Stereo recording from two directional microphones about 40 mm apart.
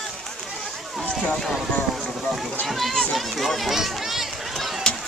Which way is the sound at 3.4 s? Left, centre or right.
Centre.